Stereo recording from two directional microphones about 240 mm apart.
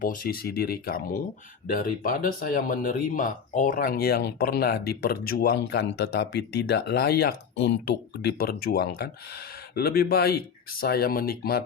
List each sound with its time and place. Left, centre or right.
0.0 s speech: left